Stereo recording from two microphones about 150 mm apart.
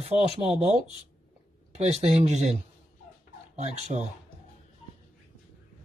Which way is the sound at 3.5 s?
45° right (ahead or behind).